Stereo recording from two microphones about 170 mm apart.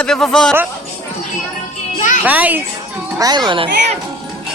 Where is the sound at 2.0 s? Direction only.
45° left (ahead or behind).